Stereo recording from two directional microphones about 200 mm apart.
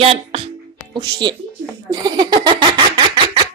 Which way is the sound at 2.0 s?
20° right (ahead or behind).